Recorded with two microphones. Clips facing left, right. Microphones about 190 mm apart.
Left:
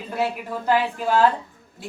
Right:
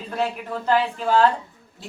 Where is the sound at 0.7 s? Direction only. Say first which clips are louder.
Even; 5° left (ahead or behind).